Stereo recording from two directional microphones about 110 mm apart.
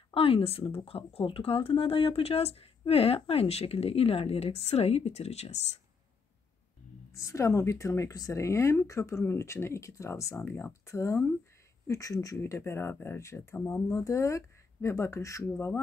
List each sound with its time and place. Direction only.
0.1 s speech: 60° left (ahead or behind); by 5.6 s 80° left
7.2 s speech: 30° left (ahead or behind)